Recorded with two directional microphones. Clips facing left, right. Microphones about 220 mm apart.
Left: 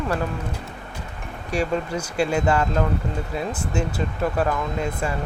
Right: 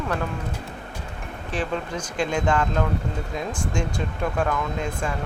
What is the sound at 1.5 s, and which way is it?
Speech, 10° left (ahead or behind).